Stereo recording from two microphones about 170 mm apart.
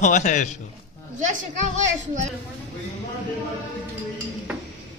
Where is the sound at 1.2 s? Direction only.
45° right (ahead or behind).